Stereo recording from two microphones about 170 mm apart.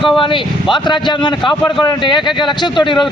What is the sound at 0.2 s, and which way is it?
Speech, 30° left (ahead or behind).